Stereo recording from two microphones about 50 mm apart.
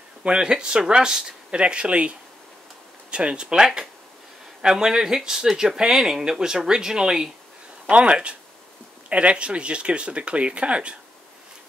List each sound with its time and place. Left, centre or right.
0.2 s speech: centre